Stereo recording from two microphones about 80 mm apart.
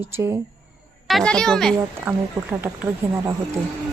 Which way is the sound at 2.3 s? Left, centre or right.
Right.